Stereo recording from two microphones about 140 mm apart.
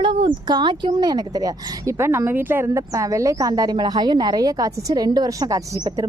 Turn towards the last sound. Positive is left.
turn(degrees=-25)  # may be behind; listen again after turning